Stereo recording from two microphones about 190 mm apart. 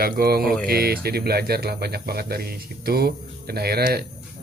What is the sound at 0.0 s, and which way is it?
Speech, 55° right (ahead or behind).